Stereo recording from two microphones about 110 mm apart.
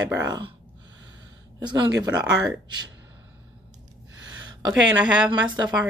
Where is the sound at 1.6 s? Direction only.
40° right (ahead or behind).